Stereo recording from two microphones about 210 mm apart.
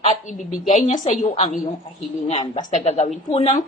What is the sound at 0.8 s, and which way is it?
A woman's voice, 35° left (ahead or behind).